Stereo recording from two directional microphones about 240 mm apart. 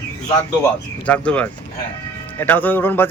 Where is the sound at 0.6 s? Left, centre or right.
Centre.